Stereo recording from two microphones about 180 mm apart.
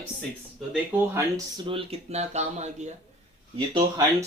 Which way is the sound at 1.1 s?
25° right (ahead or behind).